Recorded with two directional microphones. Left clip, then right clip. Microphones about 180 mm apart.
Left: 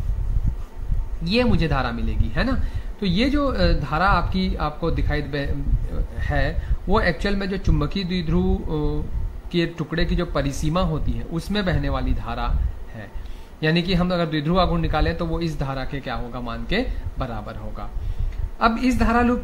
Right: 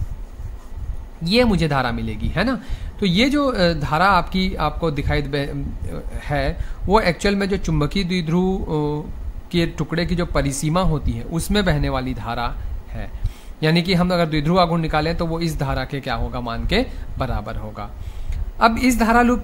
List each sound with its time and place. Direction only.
1.2 s a man's voice: 35° right (ahead or behind)